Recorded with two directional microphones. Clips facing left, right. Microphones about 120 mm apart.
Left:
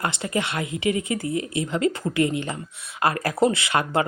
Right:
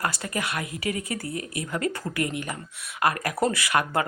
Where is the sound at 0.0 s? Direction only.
25° left (ahead or behind).